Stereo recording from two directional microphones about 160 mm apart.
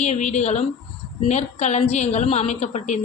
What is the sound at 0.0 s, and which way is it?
A man's voice, 45° left (ahead or behind).